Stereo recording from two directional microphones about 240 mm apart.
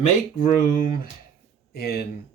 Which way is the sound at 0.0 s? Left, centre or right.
Left.